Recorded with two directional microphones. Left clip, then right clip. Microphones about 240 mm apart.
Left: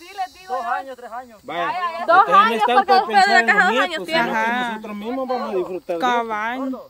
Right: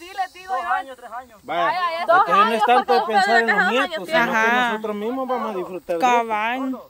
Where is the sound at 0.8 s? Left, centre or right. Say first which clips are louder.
Left 2 dB; left.